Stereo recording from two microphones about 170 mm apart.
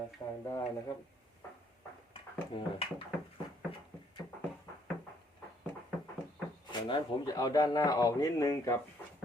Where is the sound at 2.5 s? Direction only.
35° left (ahead or behind).